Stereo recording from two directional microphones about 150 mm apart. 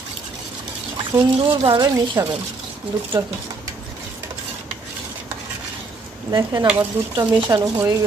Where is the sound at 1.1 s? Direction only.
30° right (ahead or behind).